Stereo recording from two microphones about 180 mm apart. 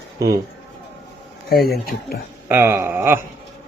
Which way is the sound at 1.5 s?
60° left (ahead or behind).